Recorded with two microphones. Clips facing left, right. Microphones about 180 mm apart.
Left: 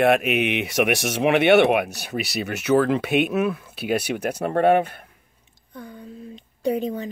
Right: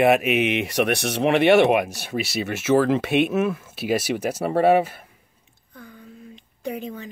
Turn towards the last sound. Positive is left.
turn(degrees=35)  # may be behind; listen again after turning